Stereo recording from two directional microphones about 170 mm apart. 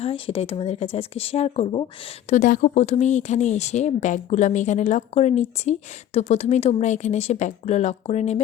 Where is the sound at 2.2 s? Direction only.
50° left (ahead or behind).